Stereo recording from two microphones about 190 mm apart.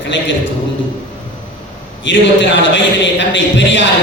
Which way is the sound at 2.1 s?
75° left (ahead or behind).